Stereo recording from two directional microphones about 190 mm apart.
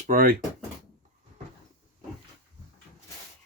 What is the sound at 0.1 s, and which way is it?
Speech, 50° right (ahead or behind).